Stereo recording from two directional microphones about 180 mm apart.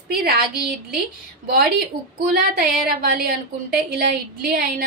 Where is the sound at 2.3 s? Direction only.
55° right (ahead or behind).